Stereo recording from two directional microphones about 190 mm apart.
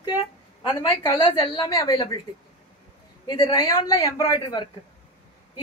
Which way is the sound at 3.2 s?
20° left (ahead or behind).